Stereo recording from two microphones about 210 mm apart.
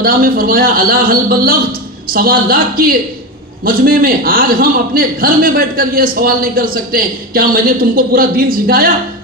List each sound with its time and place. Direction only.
0.0 s a man's voice: 45° right (ahead or behind)